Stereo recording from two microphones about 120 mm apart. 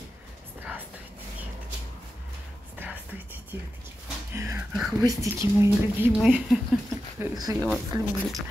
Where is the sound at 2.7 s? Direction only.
15° right (ahead or behind).